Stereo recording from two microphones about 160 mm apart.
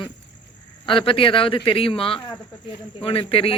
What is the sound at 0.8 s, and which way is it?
Speech, 35° left (ahead or behind).